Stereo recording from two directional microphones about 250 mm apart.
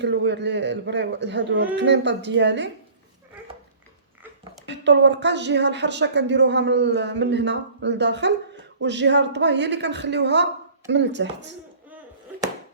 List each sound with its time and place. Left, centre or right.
0.0 s speech: right
4.7 s speech: right